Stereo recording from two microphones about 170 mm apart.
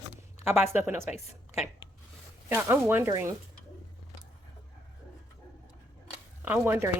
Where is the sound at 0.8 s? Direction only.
10° right (ahead or behind).